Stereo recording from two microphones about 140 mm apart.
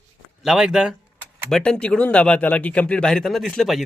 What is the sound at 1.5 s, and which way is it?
Speech, 5° left (ahead or behind).